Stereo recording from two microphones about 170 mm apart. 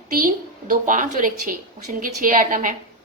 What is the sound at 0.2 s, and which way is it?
A woman's voice, 55° right (ahead or behind).